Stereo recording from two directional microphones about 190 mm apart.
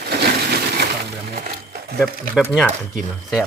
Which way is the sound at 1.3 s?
55° right (ahead or behind).